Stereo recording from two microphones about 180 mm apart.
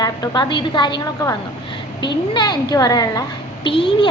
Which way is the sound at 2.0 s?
25° left (ahead or behind).